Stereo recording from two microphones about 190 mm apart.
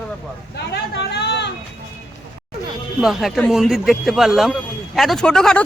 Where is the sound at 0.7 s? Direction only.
60° left (ahead or behind).